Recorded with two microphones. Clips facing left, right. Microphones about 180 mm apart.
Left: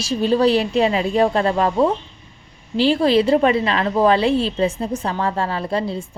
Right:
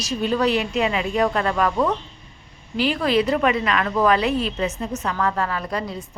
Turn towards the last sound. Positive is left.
turn(degrees=30)  # may be behind; listen again after turning